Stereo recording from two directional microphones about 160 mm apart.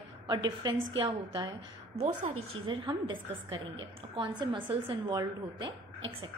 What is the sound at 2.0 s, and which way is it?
A woman's voice, 40° right (ahead or behind).